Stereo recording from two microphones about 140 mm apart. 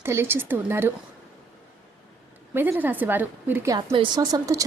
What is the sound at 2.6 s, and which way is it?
A woman's voice, 15° right (ahead or behind).